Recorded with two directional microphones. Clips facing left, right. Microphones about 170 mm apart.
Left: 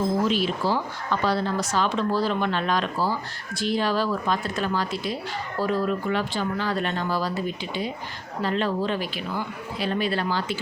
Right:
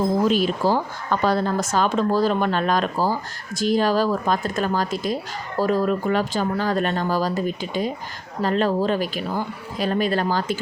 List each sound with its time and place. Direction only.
0.3 s a woman's voice: 45° right (ahead or behind)